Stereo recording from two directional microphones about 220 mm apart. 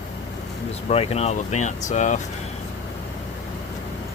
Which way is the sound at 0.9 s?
30° left (ahead or behind).